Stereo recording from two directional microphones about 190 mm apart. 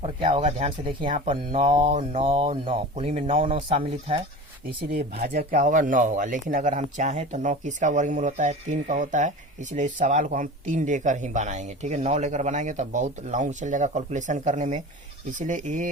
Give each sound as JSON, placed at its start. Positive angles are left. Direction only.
{"t": 0.0, "sound": "speech", "side_deg": -30}
{"t": 5.2, "sound": "speech", "side_deg": -45}